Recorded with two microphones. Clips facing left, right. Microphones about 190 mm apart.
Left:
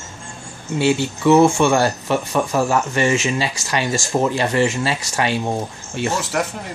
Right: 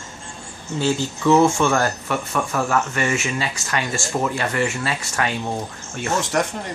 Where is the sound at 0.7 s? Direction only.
70° left (ahead or behind).